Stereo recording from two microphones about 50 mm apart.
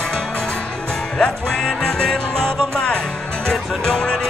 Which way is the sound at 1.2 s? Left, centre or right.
Centre.